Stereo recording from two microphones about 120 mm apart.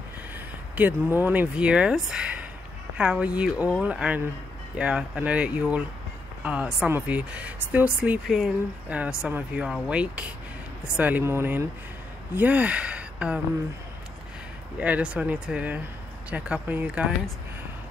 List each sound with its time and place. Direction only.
0.7 s speech: 15° right (ahead or behind)
14.8 s speech: 10° right (ahead or behind)